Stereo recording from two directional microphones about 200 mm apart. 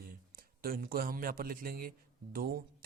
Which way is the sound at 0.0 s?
45° right (ahead or behind).